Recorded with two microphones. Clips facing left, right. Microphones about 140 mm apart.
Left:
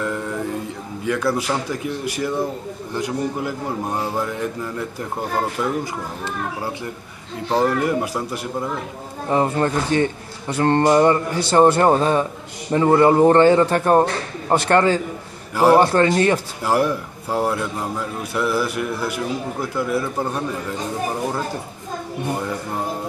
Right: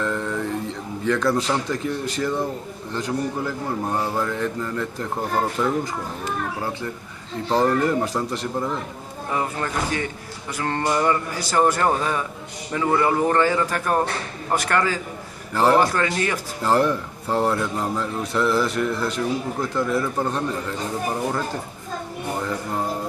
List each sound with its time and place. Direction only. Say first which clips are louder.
0.0 s a sound: even; 10° left (ahead or behind)
1.0 s speech: even; 10° left (ahead or behind)
7.4 s speech: left 1 dB; 10° left (ahead or behind)
9.3 s speech: left 7 dB; 30° left (ahead or behind)
15.5 s speech: left 4 dB; 10° left (ahead or behind)
15.8 s speech: left 6 dB; 30° left (ahead or behind)
16.6 s speech: right 1 dB; 10° left (ahead or behind)